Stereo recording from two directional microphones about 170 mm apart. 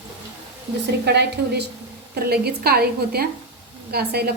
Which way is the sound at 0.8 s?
75° right (ahead or behind).